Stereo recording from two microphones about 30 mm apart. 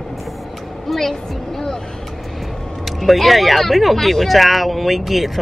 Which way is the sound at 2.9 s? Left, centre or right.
Centre.